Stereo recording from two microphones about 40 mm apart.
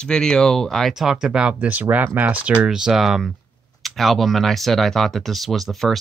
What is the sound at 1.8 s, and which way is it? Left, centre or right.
Speech, right.